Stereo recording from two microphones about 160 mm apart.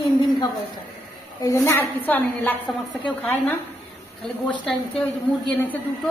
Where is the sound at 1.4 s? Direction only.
20° left (ahead or behind).